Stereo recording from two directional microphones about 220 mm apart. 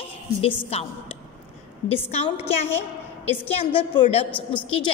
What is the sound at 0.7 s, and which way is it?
Speech, 30° left (ahead or behind).